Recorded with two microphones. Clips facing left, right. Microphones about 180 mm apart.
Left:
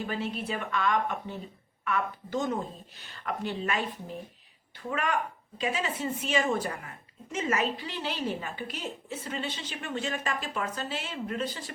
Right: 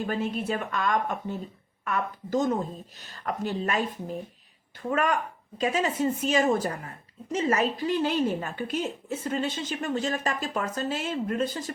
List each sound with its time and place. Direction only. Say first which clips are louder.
0.0 s a woman's voice: right 4 dB; 45° right (ahead or behind)
4.9 s speech: right 4 dB; 45° right (ahead or behind)